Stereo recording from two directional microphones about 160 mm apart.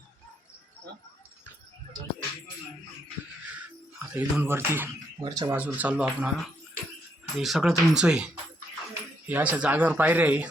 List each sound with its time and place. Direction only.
4.1 s speech: 10° right (ahead or behind)
5.5 s speech: 10° right (ahead or behind)
9.3 s speech: 10° right (ahead or behind)